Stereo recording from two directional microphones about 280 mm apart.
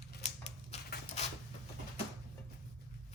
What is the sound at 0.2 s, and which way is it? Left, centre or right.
Typewriter, left.